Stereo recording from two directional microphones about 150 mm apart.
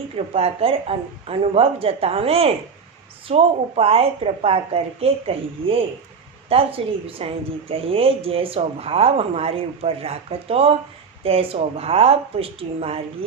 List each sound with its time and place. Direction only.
0.3 s a woman's voice: 40° right (ahead or behind)